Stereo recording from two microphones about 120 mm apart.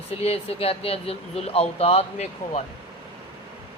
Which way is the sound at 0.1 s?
60° left (ahead or behind).